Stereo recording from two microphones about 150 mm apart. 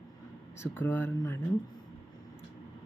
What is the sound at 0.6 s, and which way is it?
Speech, 15° left (ahead or behind).